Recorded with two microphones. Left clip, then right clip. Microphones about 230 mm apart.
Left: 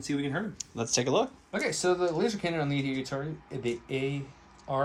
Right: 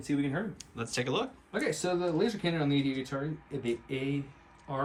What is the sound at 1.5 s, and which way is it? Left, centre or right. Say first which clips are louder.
Speech: left 2 dB; left.